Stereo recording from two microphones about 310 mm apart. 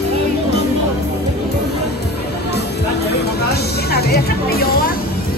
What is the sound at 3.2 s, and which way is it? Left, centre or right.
Music, left.